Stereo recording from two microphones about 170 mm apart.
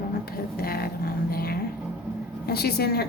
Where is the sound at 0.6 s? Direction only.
60° left (ahead or behind).